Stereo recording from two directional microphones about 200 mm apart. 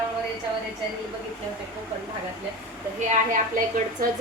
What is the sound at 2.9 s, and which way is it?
Speech, 40° right (ahead or behind).